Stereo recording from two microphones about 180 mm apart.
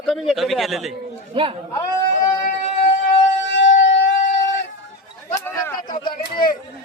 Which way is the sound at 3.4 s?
90° left.